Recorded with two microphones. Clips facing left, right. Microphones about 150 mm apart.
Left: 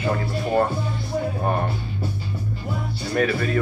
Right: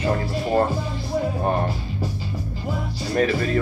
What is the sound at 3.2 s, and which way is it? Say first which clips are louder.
Speech: right 1 dB; 35° right (ahead or behind).